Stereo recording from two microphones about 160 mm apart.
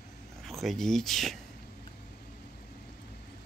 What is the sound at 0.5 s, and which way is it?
Speech, centre (ahead or behind).